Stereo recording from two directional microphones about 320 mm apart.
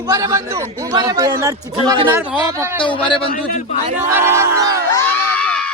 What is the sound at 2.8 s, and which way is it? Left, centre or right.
Speech, centre.